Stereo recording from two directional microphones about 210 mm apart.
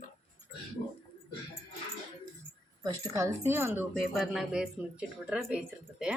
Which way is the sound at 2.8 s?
15° right (ahead or behind).